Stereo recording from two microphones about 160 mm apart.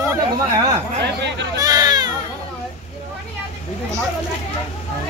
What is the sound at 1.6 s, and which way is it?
Baby cry, 25° right (ahead or behind).